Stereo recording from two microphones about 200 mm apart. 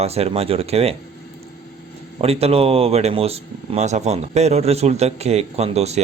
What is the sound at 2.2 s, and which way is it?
Speech, 30° right (ahead or behind).